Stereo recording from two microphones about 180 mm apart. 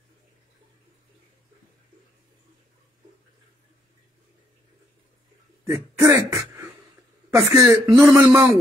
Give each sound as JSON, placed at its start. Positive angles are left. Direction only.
{"t": 5.9, "sound": "throat clearing", "side_deg": -15}
{"t": 7.2, "sound": "speech", "side_deg": -15}